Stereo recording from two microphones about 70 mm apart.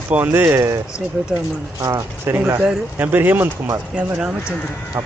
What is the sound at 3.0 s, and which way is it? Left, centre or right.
Speech, right.